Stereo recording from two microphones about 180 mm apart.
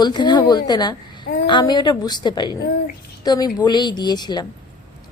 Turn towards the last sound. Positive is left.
turn(degrees=25)  # may be behind; listen again after turning